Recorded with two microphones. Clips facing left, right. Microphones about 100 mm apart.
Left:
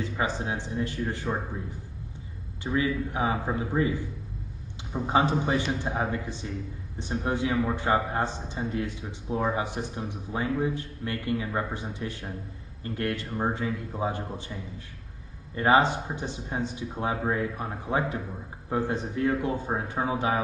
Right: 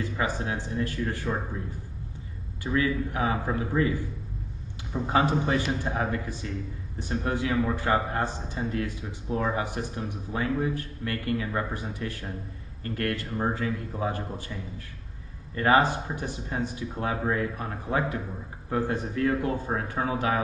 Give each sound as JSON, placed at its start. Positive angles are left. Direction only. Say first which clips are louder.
{"t": 0.0, "sound": "speech", "louder": "even", "side_deg": 20}
{"t": 2.6, "sound": "a man's voice", "louder": "right 1 dB", "side_deg": 20}
{"t": 15.5, "sound": "speech", "louder": "even", "side_deg": 20}